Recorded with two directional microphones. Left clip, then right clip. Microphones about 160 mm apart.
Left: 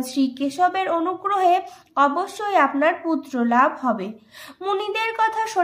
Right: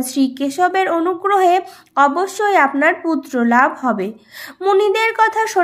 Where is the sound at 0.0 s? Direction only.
35° right (ahead or behind).